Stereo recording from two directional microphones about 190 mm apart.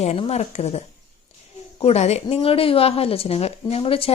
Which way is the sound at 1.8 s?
35° left (ahead or behind).